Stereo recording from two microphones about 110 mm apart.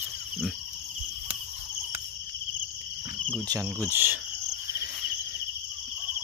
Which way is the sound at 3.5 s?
25° right (ahead or behind).